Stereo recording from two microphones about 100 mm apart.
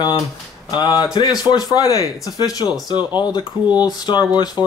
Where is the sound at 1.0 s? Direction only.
45° left (ahead or behind).